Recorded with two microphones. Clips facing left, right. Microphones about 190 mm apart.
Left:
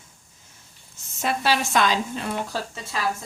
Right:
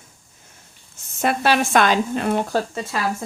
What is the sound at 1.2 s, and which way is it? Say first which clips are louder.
A woman's voice: right 5 dB; 55° right (ahead or behind).